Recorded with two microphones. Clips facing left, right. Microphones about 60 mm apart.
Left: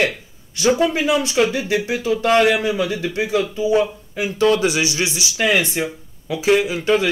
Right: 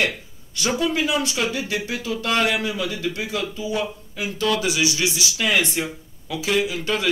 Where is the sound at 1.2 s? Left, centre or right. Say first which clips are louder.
Left 6 dB; left.